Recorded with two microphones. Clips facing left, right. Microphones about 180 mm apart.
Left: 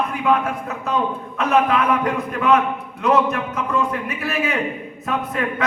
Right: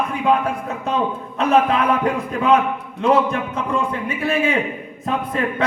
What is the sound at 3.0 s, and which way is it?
Speech, 30° right (ahead or behind).